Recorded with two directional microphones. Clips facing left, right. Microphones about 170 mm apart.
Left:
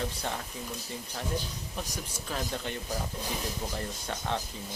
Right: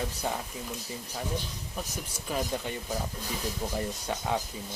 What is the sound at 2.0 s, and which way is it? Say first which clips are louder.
Speech: right 3 dB; 10° right (ahead or behind).